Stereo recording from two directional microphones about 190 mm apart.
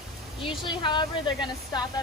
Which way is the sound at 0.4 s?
25° left (ahead or behind).